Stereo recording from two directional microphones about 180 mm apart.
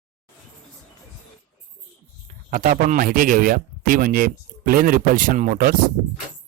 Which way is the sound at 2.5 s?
45° right (ahead or behind).